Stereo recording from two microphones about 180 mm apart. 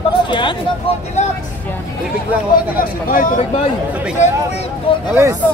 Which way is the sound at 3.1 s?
50° left (ahead or behind).